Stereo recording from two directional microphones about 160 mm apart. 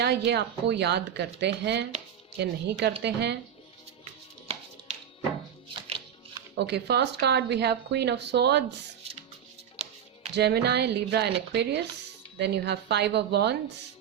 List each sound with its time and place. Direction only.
0.0 s a woman's voice: 90° right
5.6 s music: 35° right (ahead or behind)
6.6 s a woman's voice: 90° right
10.3 s a woman's voice: 90° right